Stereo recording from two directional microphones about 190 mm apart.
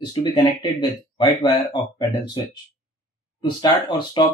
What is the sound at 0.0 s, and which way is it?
Speech, 20° left (ahead or behind).